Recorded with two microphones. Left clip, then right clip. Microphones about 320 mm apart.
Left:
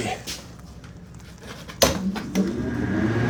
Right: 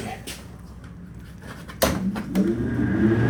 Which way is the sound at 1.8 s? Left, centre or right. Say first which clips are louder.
Left 2 dB; left.